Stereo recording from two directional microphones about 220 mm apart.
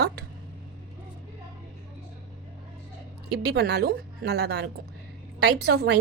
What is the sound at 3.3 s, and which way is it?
A woman's voice, 50° right (ahead or behind).